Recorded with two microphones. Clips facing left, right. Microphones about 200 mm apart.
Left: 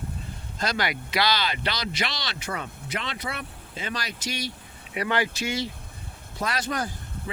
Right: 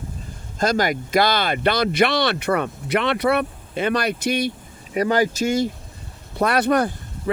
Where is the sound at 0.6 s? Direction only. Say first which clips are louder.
Right 8 dB; 45° right (ahead or behind).